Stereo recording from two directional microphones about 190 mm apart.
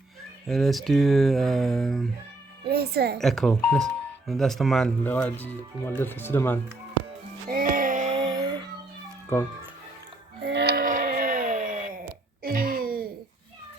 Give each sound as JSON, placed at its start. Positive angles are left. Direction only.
{"t": 0.4, "sound": "speech", "side_deg": 0}
{"t": 2.6, "sound": "a woman's voice", "side_deg": -55}
{"t": 3.2, "sound": "speech", "side_deg": 0}
{"t": 7.5, "sound": "music", "side_deg": -45}
{"t": 8.2, "sound": "a sound", "side_deg": -20}
{"t": 9.3, "sound": "speech", "side_deg": 15}
{"t": 10.4, "sound": "a sound", "side_deg": -60}